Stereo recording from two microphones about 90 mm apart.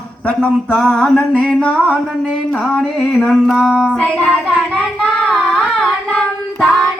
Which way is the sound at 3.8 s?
10° left (ahead or behind).